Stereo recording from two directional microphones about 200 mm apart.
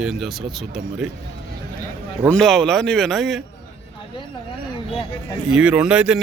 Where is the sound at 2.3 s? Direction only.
Centre (ahead or behind).